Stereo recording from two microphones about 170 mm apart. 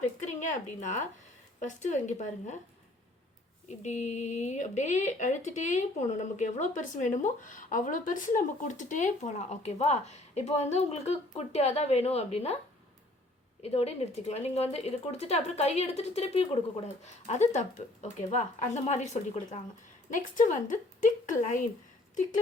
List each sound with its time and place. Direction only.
0.3 s a woman's voice: 45° left (ahead or behind)
3.7 s speech: 45° left (ahead or behind)
13.6 s speech: 40° left (ahead or behind)